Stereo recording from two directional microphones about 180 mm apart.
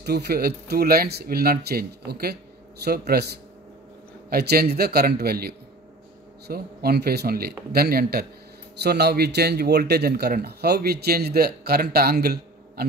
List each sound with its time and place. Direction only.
0.0 s speech: 65° right (ahead or behind)
4.3 s speech: 60° right (ahead or behind)